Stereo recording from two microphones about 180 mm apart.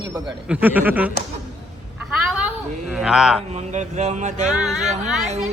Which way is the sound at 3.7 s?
40° right (ahead or behind).